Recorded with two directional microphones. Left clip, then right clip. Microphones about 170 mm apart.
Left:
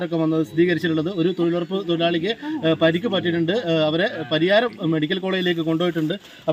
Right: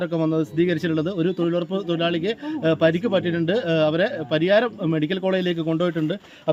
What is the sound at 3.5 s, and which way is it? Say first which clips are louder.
Speech: right 1 dB; 10° right (ahead or behind).